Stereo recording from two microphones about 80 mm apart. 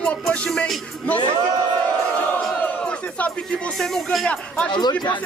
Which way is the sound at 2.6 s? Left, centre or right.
Centre.